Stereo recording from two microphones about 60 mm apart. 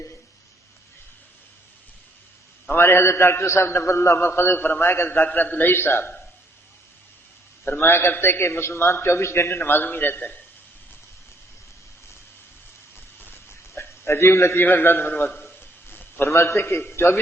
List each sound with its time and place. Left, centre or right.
2.6 s a man's voice: left
4.3 s a man's voice: left
7.6 s a man's voice: left
13.2 s a sound: left
14.6 s a man's voice: left
15.4 s a sound: left
16.2 s a man's voice: left